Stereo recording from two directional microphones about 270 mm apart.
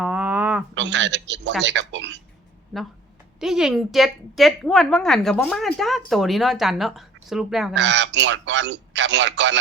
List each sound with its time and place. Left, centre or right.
0.0 s a sound: centre
0.7 s a man's voice: right
3.4 s a woman's voice: centre
7.7 s a man's voice: right